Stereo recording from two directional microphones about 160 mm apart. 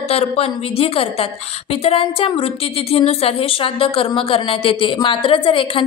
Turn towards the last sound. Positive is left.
turn(degrees=30)  # may be behind; listen again after turning